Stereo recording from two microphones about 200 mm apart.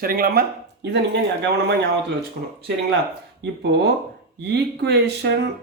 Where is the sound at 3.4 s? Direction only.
60° right (ahead or behind).